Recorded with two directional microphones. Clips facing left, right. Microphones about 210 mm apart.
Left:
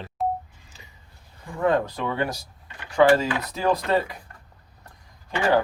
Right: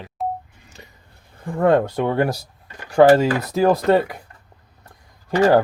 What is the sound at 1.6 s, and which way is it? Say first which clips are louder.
Speech: right 6 dB; 60° right (ahead or behind).